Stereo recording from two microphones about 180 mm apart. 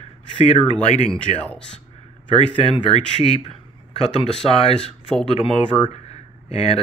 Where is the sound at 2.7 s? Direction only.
30° left (ahead or behind).